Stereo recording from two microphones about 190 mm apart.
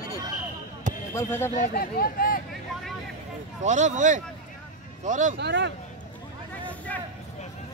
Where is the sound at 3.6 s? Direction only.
40° right (ahead or behind).